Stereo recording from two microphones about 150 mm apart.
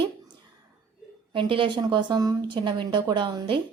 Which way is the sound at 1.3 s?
35° right (ahead or behind).